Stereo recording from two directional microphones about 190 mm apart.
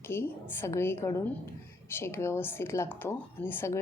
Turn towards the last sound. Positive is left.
turn(degrees=10)  # may be behind; listen again after turning